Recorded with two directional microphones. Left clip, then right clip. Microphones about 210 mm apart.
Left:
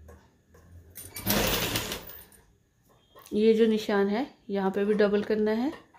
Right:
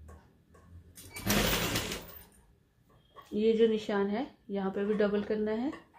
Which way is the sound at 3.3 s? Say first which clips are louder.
Left 4 dB; 40° left (ahead or behind).